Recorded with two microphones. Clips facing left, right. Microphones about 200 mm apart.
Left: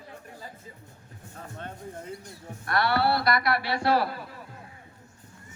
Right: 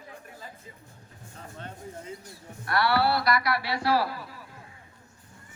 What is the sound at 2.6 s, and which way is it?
Speech, 50° left (ahead or behind).